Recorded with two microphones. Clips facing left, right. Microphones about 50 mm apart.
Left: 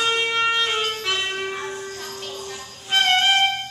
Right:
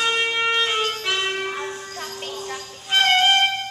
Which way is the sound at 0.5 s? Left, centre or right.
Centre.